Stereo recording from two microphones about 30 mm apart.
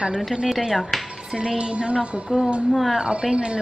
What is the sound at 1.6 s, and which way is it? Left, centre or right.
Music, right.